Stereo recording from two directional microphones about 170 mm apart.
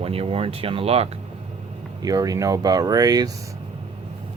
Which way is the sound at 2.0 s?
20° right (ahead or behind).